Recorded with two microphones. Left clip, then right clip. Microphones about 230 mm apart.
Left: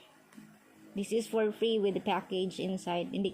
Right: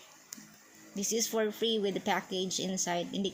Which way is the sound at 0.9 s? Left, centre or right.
Right.